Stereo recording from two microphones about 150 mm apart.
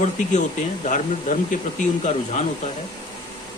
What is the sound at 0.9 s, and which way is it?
Speech, 60° left (ahead or behind).